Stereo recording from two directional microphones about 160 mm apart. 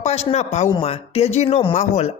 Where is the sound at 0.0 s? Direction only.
45° left (ahead or behind).